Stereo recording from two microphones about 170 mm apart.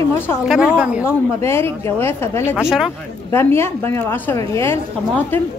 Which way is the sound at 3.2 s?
15° left (ahead or behind).